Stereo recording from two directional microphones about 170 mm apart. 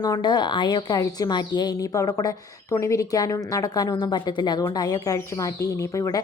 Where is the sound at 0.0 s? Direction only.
25° left (ahead or behind).